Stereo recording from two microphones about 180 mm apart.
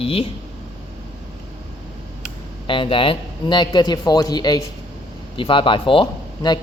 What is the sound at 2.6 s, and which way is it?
Speech, 30° left (ahead or behind).